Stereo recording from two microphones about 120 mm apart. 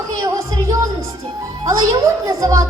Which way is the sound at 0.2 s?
30° right (ahead or behind).